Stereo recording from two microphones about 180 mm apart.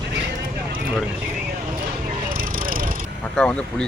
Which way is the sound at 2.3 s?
50° right (ahead or behind).